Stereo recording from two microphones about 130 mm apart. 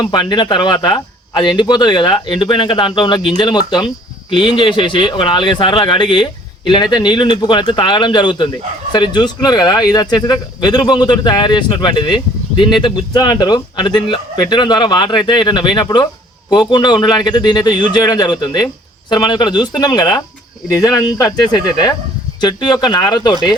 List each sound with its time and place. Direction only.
0.0 s speech: 35° left (ahead or behind)